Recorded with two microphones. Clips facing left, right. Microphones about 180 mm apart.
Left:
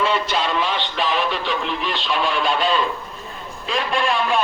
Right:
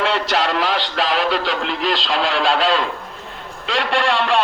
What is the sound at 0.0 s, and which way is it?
Music, 80° right.